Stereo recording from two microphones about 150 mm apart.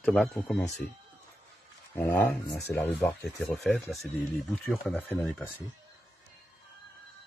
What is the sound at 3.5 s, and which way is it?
Speech, centre (ahead or behind).